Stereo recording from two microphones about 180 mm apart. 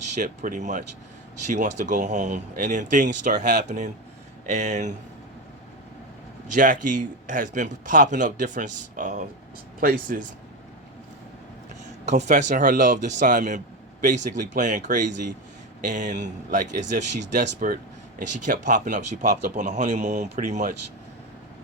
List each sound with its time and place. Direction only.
0.1 s a man's voice: 45° right (ahead or behind)
6.5 s a man's voice: 45° right (ahead or behind)
12.0 s a man's voice: 40° right (ahead or behind)